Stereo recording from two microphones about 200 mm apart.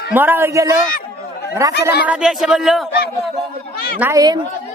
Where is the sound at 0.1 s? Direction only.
10° right (ahead or behind).